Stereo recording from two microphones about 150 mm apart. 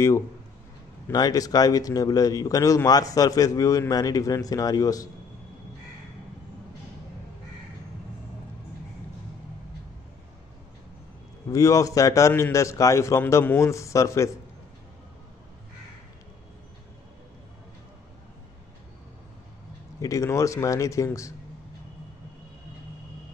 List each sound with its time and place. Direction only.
1.0 s speech: 25° left (ahead or behind)
11.5 s speech: 20° left (ahead or behind)
20.0 s speech: 20° left (ahead or behind)